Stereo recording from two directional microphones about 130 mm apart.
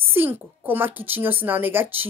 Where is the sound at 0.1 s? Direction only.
15° right (ahead or behind).